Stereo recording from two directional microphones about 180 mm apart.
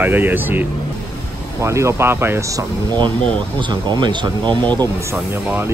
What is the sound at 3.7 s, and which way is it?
Speech, 25° right (ahead or behind).